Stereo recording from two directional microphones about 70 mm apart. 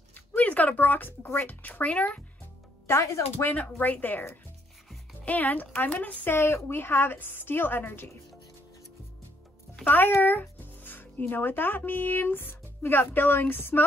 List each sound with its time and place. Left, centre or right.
0.1 s speech: left
2.9 s a woman's voice: left
3.3 s a woman's voice: left
9.8 s speech: left